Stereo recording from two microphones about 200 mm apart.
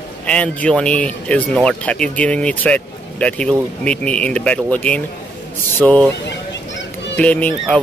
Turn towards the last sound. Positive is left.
turn(degrees=5)  # may be behind; listen again after turning